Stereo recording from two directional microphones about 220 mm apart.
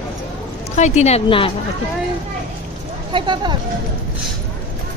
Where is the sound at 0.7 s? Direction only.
30° left (ahead or behind).